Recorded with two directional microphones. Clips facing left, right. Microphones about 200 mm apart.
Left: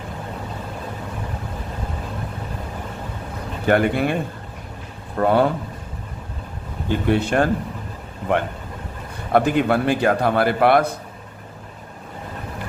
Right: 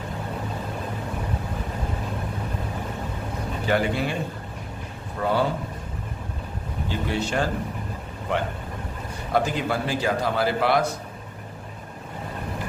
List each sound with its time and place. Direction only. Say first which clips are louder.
3.7 s a man's voice: left 6 dB; 55° left (ahead or behind)
6.8 s a man's voice: left 8 dB; 55° left (ahead or behind)
9.3 s a man's voice: left 7 dB; 60° left (ahead or behind)